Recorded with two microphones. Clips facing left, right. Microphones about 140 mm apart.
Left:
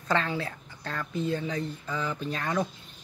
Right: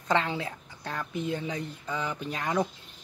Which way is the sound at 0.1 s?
20° right (ahead or behind).